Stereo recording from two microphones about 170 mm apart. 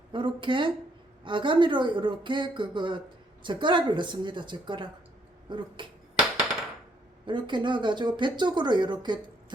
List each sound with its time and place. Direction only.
0.1 s speech: 30° right (ahead or behind)
7.3 s speech: 25° right (ahead or behind)